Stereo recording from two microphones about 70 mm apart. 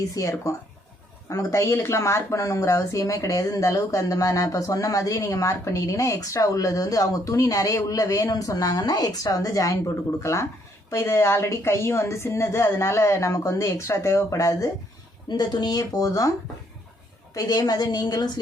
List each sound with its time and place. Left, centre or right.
0.1 s a woman's voice: left
15.3 s speech: left
17.3 s speech: left